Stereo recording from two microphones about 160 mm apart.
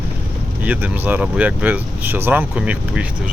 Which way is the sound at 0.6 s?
10° right (ahead or behind).